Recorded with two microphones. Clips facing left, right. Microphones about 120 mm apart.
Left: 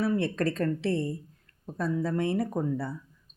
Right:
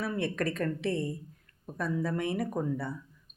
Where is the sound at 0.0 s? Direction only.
30° left (ahead or behind).